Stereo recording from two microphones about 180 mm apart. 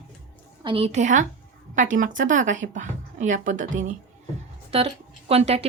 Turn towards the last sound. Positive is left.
turn(degrees=-35)  # may be behind; listen again after turning